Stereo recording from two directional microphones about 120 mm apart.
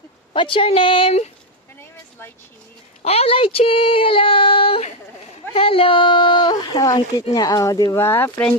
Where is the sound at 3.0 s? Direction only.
55° left (ahead or behind); by 8.4 s 20° left (ahead or behind).